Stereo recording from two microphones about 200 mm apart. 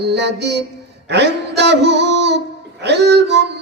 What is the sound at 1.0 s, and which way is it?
Speech, 60° right (ahead or behind).